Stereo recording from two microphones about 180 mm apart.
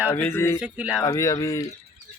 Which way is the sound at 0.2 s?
10° left (ahead or behind).